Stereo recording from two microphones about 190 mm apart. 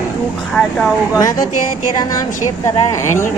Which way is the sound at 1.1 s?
20° left (ahead or behind).